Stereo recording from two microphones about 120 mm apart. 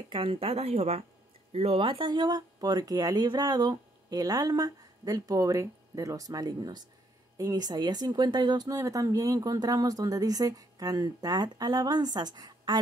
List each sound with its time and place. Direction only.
0.1 s a woman's voice: 50° right (ahead or behind)